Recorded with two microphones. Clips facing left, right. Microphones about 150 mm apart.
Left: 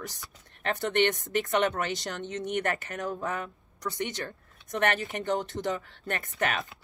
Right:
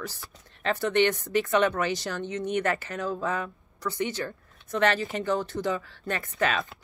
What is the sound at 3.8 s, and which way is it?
Speech, 20° left (ahead or behind).